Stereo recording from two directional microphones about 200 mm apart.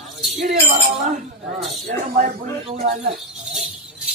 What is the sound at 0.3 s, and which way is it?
Speech, 35° right (ahead or behind).